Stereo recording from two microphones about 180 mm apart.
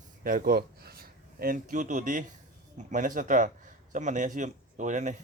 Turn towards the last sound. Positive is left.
turn(degrees=-45)  # may be behind; listen again after turning